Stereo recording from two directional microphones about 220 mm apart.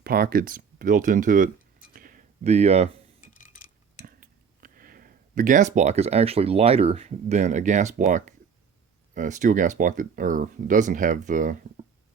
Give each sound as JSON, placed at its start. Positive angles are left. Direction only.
{"t": 0.0, "sound": "speech", "side_deg": -40}
{"t": 1.9, "sound": "a sound", "side_deg": -40}
{"t": 3.3, "sound": "clock", "side_deg": 35}
{"t": 4.0, "sound": "speech", "side_deg": -40}